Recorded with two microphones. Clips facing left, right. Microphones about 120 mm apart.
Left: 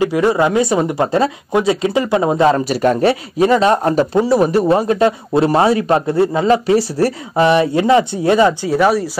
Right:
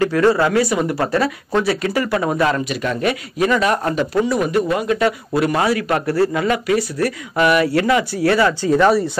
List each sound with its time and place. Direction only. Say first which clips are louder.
0.0 s speech: left 1 dB; 15° left (ahead or behind)
2.7 s speech: left 7 dB; 40° left (ahead or behind); by 8.5 s 20° left (ahead or behind)
8.6 s speech: even; 5° left (ahead or behind)